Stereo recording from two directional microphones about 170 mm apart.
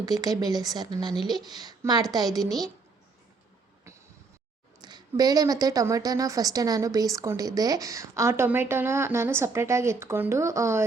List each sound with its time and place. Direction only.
0.0 s speech: 20° right (ahead or behind)
2.4 s a woman's voice: centre (ahead or behind)
4.8 s a woman's voice: 25° right (ahead or behind)